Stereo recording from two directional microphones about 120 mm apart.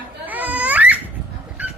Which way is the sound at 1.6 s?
15° right (ahead or behind).